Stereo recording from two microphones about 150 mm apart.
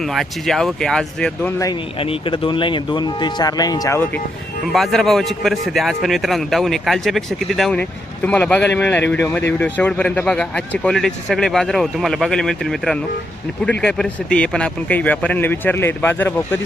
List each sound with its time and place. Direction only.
0.1 s speech: centre (ahead or behind)
2.0 s speech: 35° left (ahead or behind)
4.6 s speech: centre (ahead or behind)